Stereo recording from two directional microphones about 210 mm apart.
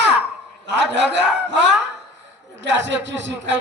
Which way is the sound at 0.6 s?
55° right (ahead or behind).